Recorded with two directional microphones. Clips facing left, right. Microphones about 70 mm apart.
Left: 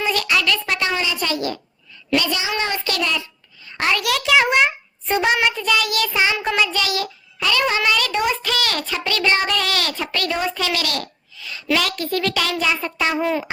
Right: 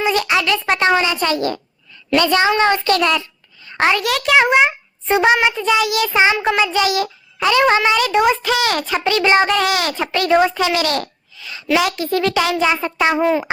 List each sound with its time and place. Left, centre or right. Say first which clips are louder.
0.0 s a sound: right 3 dB; right
0.7 s a child's voice: right 7 dB; right
4.4 s a child's voice: right 4 dB; centre
5.3 s child singing: right 4 dB; centre
7.4 s a child's voice: right 6 dB; right
7.8 s child singing: right 5 dB; right
10.3 s a child's voice: right 10 dB; right
11.7 s child singing: right 4 dB; centre